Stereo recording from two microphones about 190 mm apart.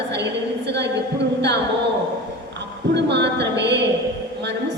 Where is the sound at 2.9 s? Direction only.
65° right (ahead or behind).